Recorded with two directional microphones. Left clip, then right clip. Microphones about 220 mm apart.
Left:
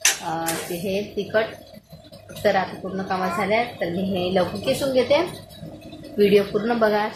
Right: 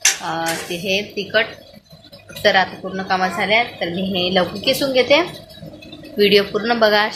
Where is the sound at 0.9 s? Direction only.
Centre (ahead or behind).